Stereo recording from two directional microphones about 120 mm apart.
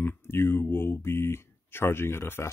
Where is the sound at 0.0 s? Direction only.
20° left (ahead or behind).